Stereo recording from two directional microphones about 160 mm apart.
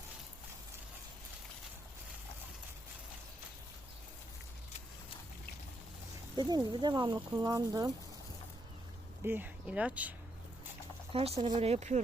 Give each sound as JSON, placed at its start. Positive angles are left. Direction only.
{"t": 6.3, "sound": "speech", "side_deg": -25}
{"t": 9.2, "sound": "speech", "side_deg": -10}
{"t": 11.1, "sound": "speech", "side_deg": -40}